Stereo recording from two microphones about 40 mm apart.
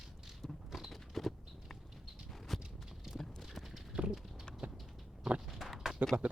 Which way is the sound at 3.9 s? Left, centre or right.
Right.